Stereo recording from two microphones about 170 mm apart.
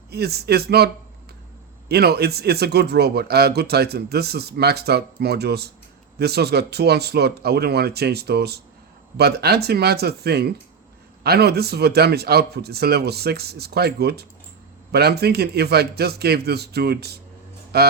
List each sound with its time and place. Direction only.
0.1 s speech: 70° right (ahead or behind)
1.9 s speech: 70° right (ahead or behind)